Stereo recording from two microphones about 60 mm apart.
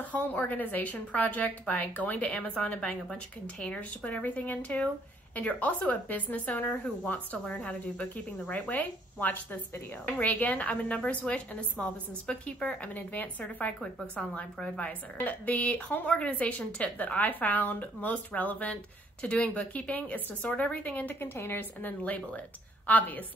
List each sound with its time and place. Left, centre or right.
0.1 s a woman's voice: left
21.2 s a woman's voice: left